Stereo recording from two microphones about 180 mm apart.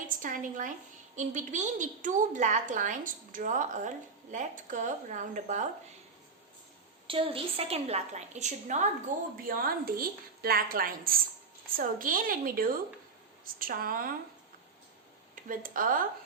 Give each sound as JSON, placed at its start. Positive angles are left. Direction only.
{"t": 0.2, "sound": "a woman's voice", "side_deg": -50}
{"t": 7.1, "sound": "a woman's voice", "side_deg": -30}
{"t": 15.4, "sound": "a woman's voice", "side_deg": -50}